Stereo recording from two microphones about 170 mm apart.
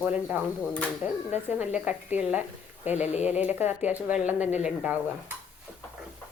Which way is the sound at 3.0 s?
40° left (ahead or behind).